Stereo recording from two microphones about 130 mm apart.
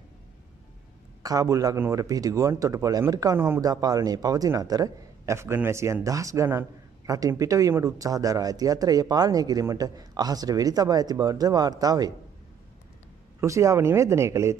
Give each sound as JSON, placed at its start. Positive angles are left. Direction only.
{"t": 1.2, "sound": "speech", "side_deg": -30}
{"t": 13.4, "sound": "speech", "side_deg": -25}